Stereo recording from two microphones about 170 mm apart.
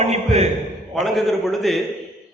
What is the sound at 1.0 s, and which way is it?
Speech, centre (ahead or behind).